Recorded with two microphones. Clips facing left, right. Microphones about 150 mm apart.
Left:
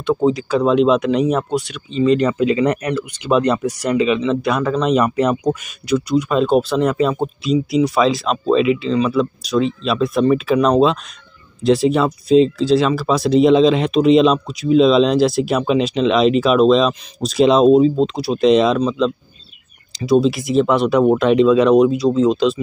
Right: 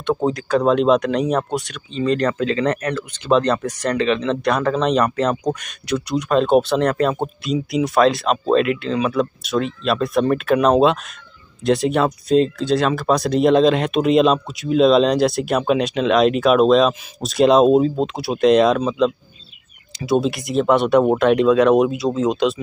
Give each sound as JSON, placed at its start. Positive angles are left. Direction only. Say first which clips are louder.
{"t": 0.0, "sound": "speech", "louder": "left 4 dB", "side_deg": 0}